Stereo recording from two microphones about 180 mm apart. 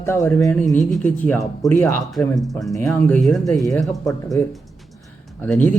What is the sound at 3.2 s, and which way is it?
Speech, centre (ahead or behind).